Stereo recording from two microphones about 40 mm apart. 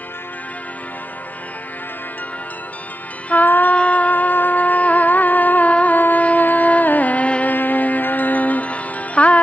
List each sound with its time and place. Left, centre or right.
3.4 s music: left
3.7 s music: left
5.9 s music: left
7.5 s music: left